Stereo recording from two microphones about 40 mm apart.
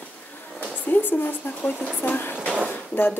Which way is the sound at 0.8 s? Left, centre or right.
Left.